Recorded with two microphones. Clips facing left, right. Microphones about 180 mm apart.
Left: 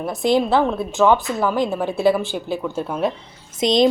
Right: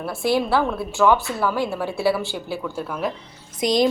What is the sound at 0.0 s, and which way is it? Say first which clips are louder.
A woman's voice: left 3 dB; 20° left (ahead or behind).